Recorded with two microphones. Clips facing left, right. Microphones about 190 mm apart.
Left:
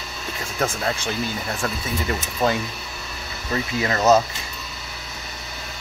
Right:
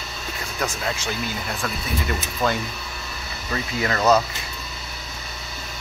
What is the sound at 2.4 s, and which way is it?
Speech, 20° left (ahead or behind).